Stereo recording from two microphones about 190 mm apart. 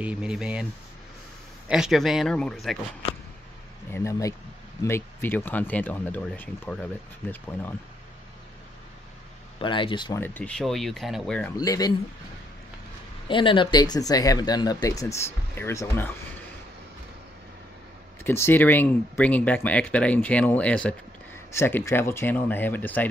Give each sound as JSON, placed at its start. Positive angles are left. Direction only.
{"t": 0.0, "sound": "speech", "side_deg": -5}
{"t": 1.7, "sound": "speech", "side_deg": 0}
{"t": 3.9, "sound": "speech", "side_deg": 15}
{"t": 9.6, "sound": "speech", "side_deg": 25}
{"t": 10.2, "sound": "speech", "side_deg": 10}
{"t": 11.5, "sound": "speech", "side_deg": 20}
{"t": 13.3, "sound": "speech", "side_deg": 25}
{"t": 18.2, "sound": "speech", "side_deg": 10}